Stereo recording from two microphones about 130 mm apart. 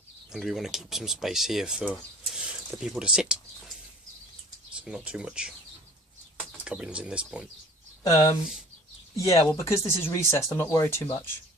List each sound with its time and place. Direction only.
0.3 s speech: centre (ahead or behind)
4.8 s speech: 5° right (ahead or behind)
8.0 s speech: 25° left (ahead or behind)